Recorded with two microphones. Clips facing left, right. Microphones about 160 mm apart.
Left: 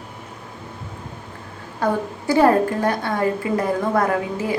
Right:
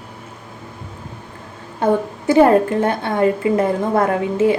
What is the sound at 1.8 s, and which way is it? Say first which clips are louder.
A woman's voice: right 5 dB; 20° right (ahead or behind).